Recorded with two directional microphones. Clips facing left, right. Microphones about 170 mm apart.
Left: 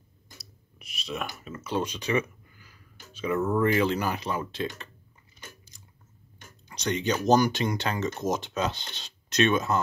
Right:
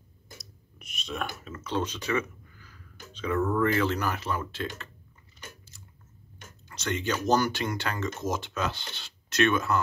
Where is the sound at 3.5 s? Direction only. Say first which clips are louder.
Left 3 dB; 15° left (ahead or behind).